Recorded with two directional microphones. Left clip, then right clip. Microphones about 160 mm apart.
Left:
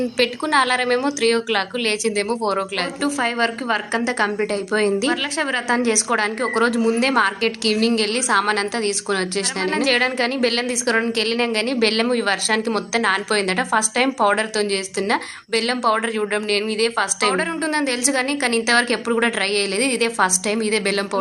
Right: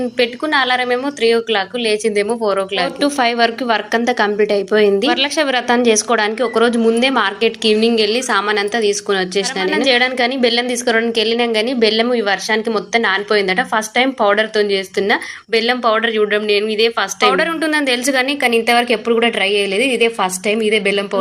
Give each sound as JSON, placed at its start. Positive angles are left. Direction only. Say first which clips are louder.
{"t": 0.2, "sound": "a woman's voice", "louder": "right 2 dB", "side_deg": -5}
{"t": 3.0, "sound": "a woman's voice", "louder": "right 6 dB", "side_deg": -30}
{"t": 5.0, "sound": "a woman's voice", "louder": "right 6 dB", "side_deg": -40}